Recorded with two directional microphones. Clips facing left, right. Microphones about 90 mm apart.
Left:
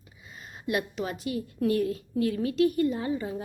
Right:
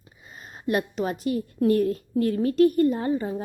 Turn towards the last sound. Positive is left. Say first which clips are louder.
# right 5 dB
turn(degrees=-40)  # may be behind; listen again after turning